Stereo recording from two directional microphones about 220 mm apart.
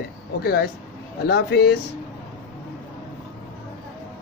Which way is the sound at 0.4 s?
45° left (ahead or behind).